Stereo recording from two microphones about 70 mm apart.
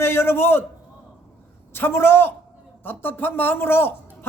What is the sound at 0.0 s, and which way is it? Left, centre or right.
Speech, left.